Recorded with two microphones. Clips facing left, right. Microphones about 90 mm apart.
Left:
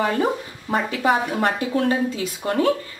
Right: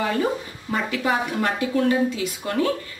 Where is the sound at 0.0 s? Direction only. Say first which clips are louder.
Left 2 dB; 35° left (ahead or behind).